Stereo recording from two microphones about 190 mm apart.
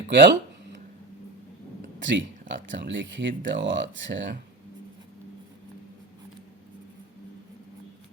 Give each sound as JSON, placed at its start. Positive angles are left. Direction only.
{"t": 0.1, "sound": "speech", "side_deg": -65}
{"t": 2.0, "sound": "speech", "side_deg": -70}